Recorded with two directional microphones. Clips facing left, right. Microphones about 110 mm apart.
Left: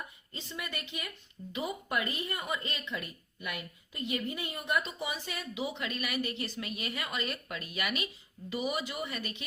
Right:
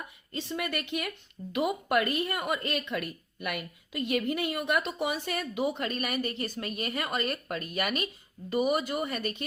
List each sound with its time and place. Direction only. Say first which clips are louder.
0.3 s a woman's voice: right 8 dB; 60° right (ahead or behind)